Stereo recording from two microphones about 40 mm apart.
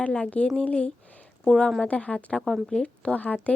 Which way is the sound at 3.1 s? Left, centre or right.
Left.